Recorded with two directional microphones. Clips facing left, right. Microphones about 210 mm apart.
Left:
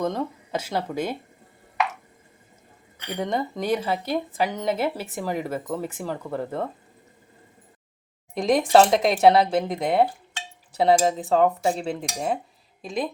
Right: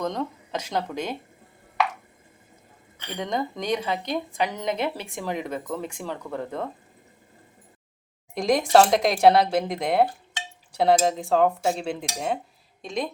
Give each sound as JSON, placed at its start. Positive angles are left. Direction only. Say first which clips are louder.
{"t": 0.0, "sound": "speech", "louder": "left 2 dB", "side_deg": 5}
{"t": 3.2, "sound": "speech", "louder": "left 2 dB", "side_deg": 5}
{"t": 8.4, "sound": "speech", "louder": "left 1 dB", "side_deg": 0}